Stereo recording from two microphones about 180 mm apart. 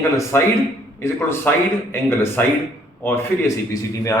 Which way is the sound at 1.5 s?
10° left (ahead or behind).